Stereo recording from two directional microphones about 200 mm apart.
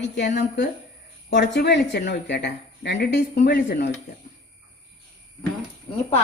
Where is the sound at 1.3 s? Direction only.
60° left (ahead or behind).